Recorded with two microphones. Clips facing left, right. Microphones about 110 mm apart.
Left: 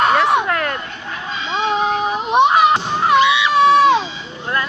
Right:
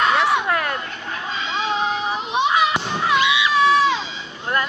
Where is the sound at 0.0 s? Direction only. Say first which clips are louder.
Left 4 dB; 45° left (ahead or behind).